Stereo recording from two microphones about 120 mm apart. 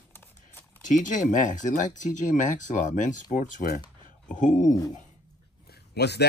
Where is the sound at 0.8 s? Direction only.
90° left.